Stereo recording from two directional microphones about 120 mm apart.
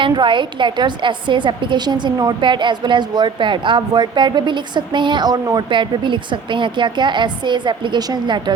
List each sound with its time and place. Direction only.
0.0 s a woman's voice: 40° right (ahead or behind)